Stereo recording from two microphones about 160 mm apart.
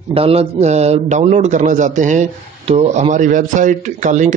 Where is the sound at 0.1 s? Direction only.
35° right (ahead or behind).